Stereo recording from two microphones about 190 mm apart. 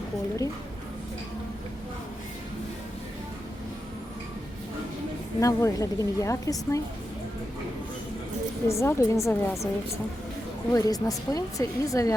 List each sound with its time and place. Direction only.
5.4 s speech: 15° left (ahead or behind)
8.6 s speech: 15° left (ahead or behind)
10.7 s speech: 20° left (ahead or behind)